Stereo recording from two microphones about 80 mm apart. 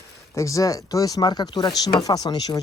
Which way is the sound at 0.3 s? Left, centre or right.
Left.